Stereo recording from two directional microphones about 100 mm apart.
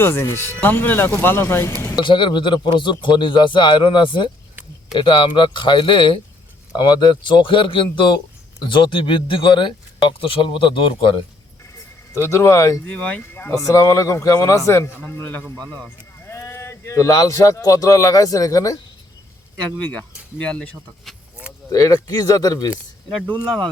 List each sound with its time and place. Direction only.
0.0 s speech: 25° left (ahead or behind)
2.0 s a man's voice: 55° left (ahead or behind)
12.1 s a man's voice: 30° left (ahead or behind)
12.8 s speech: 15° left (ahead or behind)
13.7 s a man's voice: 35° left (ahead or behind); by 15.9 s 10° left (ahead or behind)
16.2 s a man's voice: 25° left (ahead or behind)
19.5 s speech: 10° left (ahead or behind)
21.7 s a man's voice: 35° left (ahead or behind)